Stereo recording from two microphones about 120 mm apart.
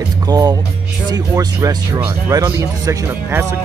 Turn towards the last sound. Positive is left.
turn(degrees=-20)  # may be behind; listen again after turning